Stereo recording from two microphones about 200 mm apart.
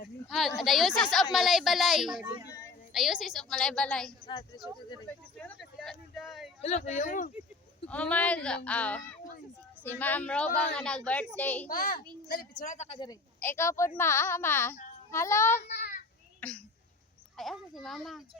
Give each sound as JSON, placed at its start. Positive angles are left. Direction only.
{"t": 0.3, "sound": "a woman's voice", "side_deg": 0}
{"t": 4.3, "sound": "a man's voice", "side_deg": 25}
{"t": 5.0, "sound": "a sound", "side_deg": 5}
{"t": 6.6, "sound": "a woman's voice", "side_deg": 35}
{"t": 7.9, "sound": "a woman's voice", "side_deg": 5}
{"t": 11.7, "sound": "a child's voice", "side_deg": 45}
{"t": 13.4, "sound": "a woman's voice", "side_deg": 10}
{"t": 15.6, "sound": "child singing", "side_deg": 55}
{"t": 16.4, "sound": "a woman's voice", "side_deg": 5}